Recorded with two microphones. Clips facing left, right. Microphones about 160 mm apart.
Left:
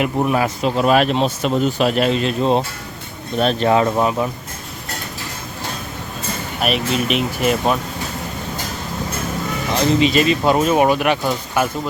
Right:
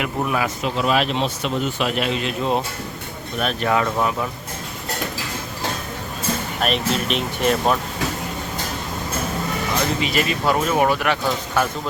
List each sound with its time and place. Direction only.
0.0 s speech: 30° left (ahead or behind)
0.9 s speech: 45° left (ahead or behind); by 4.1 s 25° left (ahead or behind)
6.6 s speech: 5° left (ahead or behind)
10.0 s speech: 20° left (ahead or behind)